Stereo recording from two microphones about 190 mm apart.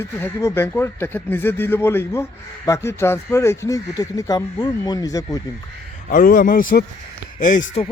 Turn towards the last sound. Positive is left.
turn(degrees=35)  # may be behind; listen again after turning